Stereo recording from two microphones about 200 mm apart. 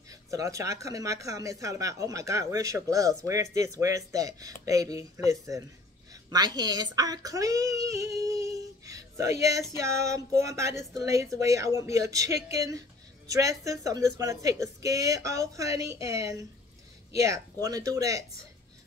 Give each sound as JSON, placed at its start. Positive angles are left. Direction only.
{"t": 0.1, "sound": "speech", "side_deg": -15}
{"t": 6.3, "sound": "a woman's voice", "side_deg": -20}
{"t": 7.0, "sound": "female singing", "side_deg": -20}
{"t": 10.4, "sound": "speech", "side_deg": -15}